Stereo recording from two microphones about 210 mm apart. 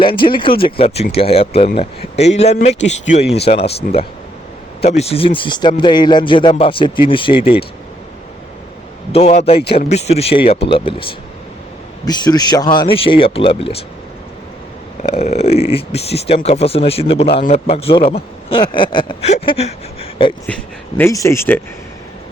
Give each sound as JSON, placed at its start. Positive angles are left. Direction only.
{"t": 0.0, "sound": "speech", "side_deg": 25}
{"t": 9.1, "sound": "speech", "side_deg": 30}
{"t": 15.0, "sound": "speech", "side_deg": 30}
{"t": 21.0, "sound": "speech", "side_deg": 15}